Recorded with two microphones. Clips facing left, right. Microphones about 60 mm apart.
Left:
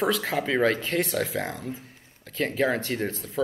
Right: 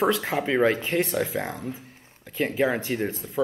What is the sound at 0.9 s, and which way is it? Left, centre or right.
Speech, centre.